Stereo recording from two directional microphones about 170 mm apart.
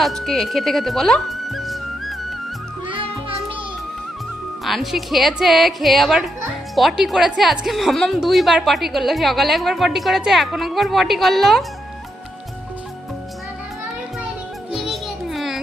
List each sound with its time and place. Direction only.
0.0 s speech: centre (ahead or behind)
2.8 s music: 30° right (ahead or behind)
4.6 s a woman's voice: centre (ahead or behind)
14.7 s music: centre (ahead or behind)